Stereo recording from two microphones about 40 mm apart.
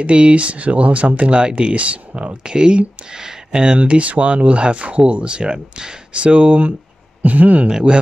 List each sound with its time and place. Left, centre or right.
0.0 s speech: right
3.7 s speech: right